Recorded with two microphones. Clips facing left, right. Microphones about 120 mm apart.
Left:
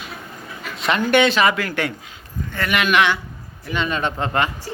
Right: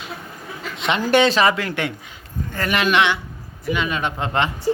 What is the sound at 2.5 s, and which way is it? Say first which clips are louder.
Speech: even; 35° right (ahead or behind).